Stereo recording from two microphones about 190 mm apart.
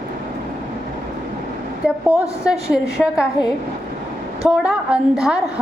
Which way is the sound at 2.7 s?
5° right (ahead or behind).